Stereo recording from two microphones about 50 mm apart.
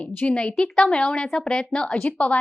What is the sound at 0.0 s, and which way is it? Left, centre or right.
A woman's voice, left.